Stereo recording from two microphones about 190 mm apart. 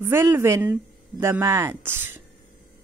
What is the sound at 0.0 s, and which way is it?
Speech, 15° right (ahead or behind).